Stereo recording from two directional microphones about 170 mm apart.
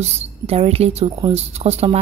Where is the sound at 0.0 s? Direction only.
40° right (ahead or behind).